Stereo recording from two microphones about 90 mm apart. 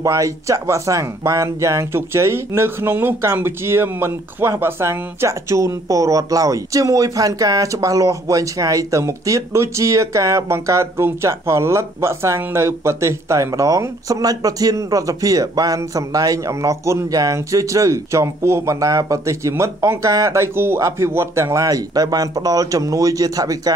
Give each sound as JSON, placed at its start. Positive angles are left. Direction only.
{"t": 0.0, "sound": "speech", "side_deg": -35}